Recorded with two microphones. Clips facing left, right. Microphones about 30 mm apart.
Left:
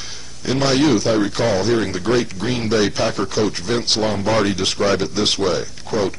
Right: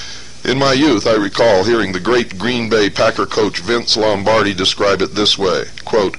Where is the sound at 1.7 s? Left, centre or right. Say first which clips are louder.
Right 4 dB; right.